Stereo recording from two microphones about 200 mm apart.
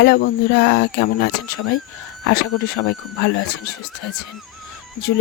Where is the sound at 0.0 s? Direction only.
55° left (ahead or behind).